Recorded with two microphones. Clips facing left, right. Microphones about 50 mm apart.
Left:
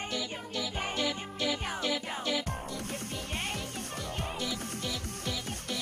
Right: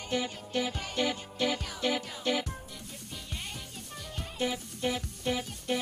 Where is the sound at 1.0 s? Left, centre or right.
Centre.